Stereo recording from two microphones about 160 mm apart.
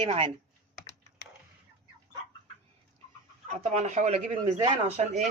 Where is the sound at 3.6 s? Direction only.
45° right (ahead or behind).